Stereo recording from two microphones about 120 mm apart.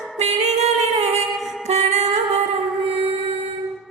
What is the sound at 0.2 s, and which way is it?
Music, 65° right (ahead or behind).